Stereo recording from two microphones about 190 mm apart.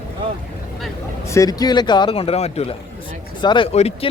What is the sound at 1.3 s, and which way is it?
Speech, 20° left (ahead or behind).